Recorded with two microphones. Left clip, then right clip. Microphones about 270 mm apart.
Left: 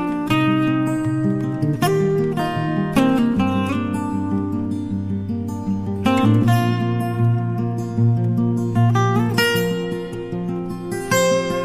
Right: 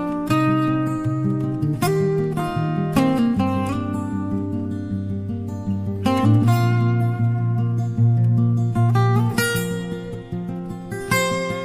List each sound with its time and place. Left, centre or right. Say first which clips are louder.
0.3 s music: left 1 dB; right
6.0 s music: left 2 dB; right
8.7 s music: left 2 dB; right
11.1 s music: left 4 dB; right